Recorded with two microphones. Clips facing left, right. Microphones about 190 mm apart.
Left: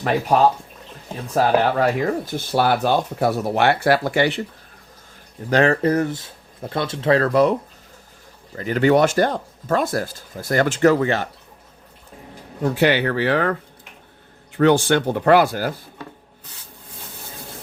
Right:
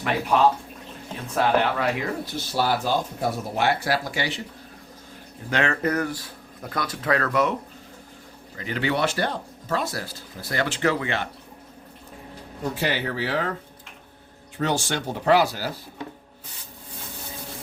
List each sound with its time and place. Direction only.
0.0 s speech: 40° left (ahead or behind); by 4.4 s 60° left (ahead or behind)
5.5 s speech: 35° left (ahead or behind)
8.5 s speech: 45° left (ahead or behind)
12.6 s speech: 65° left (ahead or behind)